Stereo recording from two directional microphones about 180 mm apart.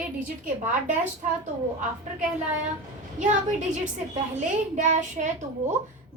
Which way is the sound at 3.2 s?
45° right (ahead or behind).